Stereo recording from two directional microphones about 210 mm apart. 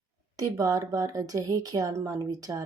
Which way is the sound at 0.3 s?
15° right (ahead or behind).